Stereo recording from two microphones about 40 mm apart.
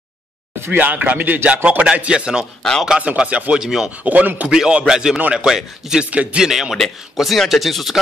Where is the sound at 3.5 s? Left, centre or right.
Centre.